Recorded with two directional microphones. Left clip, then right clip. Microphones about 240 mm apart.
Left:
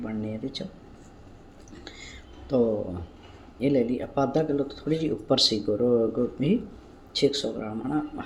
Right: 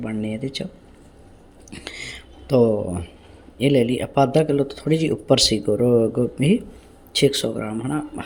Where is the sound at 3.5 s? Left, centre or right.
Right.